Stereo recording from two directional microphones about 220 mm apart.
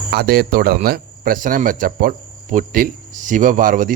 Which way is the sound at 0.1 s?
45° right (ahead or behind).